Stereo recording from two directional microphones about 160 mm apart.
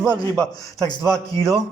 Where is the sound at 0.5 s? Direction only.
20° left (ahead or behind).